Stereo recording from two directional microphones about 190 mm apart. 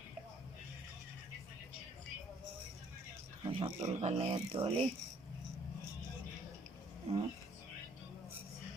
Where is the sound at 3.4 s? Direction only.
25° right (ahead or behind).